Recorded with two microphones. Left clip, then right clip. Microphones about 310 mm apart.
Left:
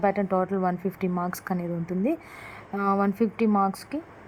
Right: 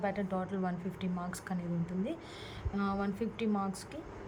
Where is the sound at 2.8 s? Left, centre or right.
Centre.